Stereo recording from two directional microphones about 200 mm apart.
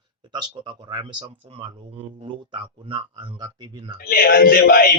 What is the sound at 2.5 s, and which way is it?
A man's voice, 25° right (ahead or behind).